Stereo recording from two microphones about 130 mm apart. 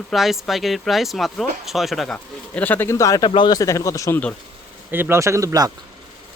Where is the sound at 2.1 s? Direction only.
10° left (ahead or behind).